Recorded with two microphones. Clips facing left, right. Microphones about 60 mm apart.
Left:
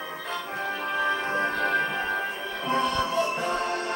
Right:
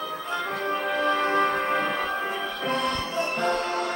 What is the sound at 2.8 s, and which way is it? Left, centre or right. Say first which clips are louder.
Music: left 2 dB; right.